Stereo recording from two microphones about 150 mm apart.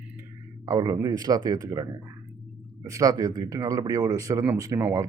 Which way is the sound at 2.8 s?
20° right (ahead or behind).